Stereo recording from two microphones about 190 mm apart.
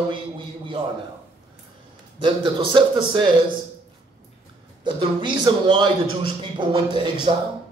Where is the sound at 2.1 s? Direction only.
25° right (ahead or behind).